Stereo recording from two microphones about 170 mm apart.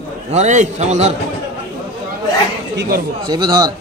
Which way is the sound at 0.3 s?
45° right (ahead or behind).